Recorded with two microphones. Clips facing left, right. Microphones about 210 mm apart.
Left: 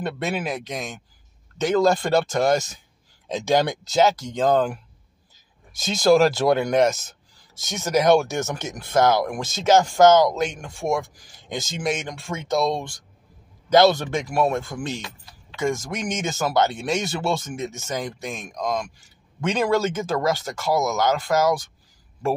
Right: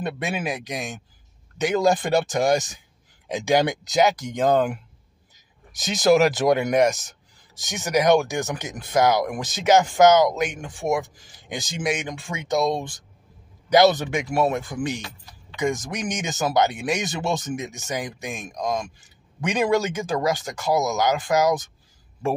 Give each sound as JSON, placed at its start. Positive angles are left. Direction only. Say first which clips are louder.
{"t": 0.2, "sound": "speech", "louder": "left 1 dB", "side_deg": -15}